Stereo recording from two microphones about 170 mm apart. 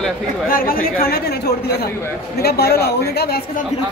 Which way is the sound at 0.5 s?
55° left (ahead or behind).